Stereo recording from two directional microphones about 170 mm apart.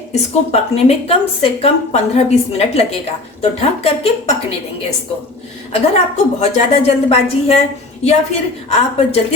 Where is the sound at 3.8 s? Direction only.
35° left (ahead or behind).